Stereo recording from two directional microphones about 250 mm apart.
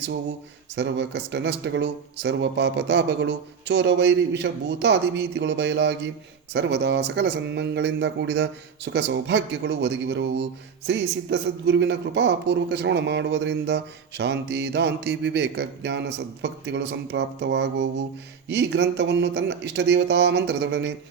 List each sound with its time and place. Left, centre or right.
0.8 s speech: right